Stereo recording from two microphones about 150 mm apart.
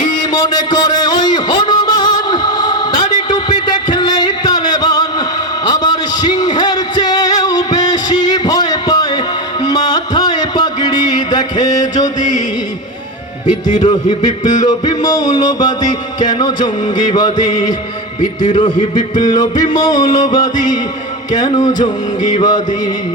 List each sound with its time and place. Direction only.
0.2 s a sound: 30° left (ahead or behind)
5.6 s music: 30° left (ahead or behind)
14.6 s music: 25° left (ahead or behind)
18.5 s speech: 30° left (ahead or behind)
19.2 s music: 25° left (ahead or behind)
21.3 s speech: 30° left (ahead or behind)
22.4 s music: 30° left (ahead or behind)